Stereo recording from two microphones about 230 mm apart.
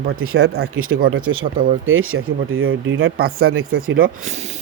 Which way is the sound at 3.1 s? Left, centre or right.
Right.